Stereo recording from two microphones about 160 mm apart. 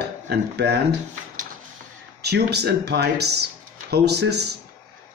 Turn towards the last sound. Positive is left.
turn(degrees=-90)